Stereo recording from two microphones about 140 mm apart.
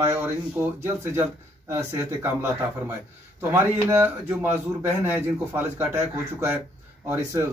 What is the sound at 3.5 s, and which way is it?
Speech, 15° right (ahead or behind).